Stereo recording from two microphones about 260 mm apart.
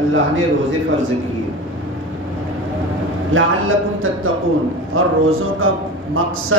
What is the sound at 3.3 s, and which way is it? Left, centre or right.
Speech, right.